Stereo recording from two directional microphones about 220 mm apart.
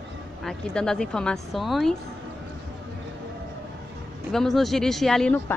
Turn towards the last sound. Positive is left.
turn(degrees=5)  # may be behind; listen again after turning